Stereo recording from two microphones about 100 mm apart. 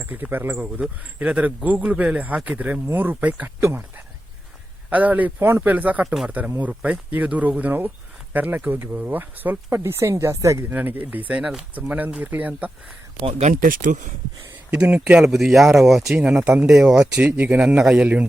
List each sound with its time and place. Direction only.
0.0 s speech: 20° right (ahead or behind)
10.8 s speech: 20° right (ahead or behind)
14.7 s speech: 10° right (ahead or behind)